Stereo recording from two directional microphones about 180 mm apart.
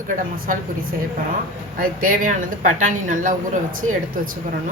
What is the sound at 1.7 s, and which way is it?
Speech, 50° right (ahead or behind).